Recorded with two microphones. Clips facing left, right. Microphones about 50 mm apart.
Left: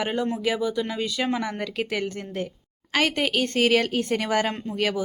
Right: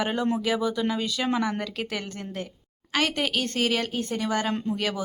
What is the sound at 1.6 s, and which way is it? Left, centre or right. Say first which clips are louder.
Speech: left 4 dB; left.